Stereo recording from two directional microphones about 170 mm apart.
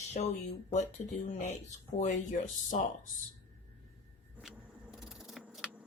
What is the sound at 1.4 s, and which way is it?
Speech, 45° left (ahead or behind).